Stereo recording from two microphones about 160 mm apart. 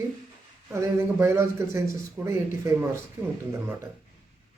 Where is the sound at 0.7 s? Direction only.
15° right (ahead or behind).